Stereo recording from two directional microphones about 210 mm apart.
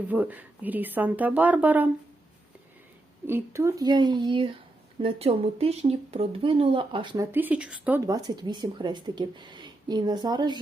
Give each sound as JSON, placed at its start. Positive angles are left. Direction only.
{"t": 0.1, "sound": "speech", "side_deg": -10}
{"t": 3.2, "sound": "a woman's voice", "side_deg": -10}
{"t": 7.3, "sound": "a woman's voice", "side_deg": -10}